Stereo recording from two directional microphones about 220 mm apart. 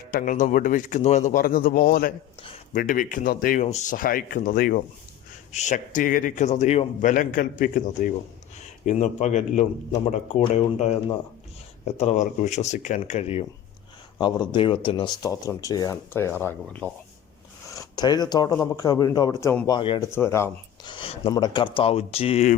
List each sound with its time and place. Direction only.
0.1 s a man's voice: 40° left (ahead or behind)
2.4 s a sound: 25° left (ahead or behind)
2.8 s a man's voice: 40° left (ahead or behind)
11.9 s a man's voice: 35° left (ahead or behind)